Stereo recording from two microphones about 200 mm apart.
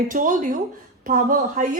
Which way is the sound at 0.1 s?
40° right (ahead or behind).